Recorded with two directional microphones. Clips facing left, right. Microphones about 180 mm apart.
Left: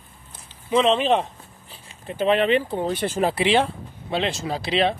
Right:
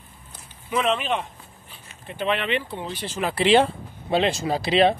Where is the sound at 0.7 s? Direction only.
30° left (ahead or behind); by 3.2 s 50° left (ahead or behind).